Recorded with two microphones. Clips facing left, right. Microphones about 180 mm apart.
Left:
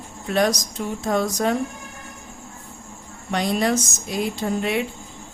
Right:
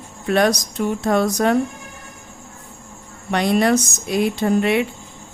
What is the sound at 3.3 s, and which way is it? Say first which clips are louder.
Speech: right 5 dB; 65° right (ahead or behind).